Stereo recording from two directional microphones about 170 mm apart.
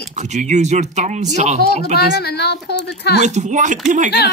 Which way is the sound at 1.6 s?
70° left (ahead or behind).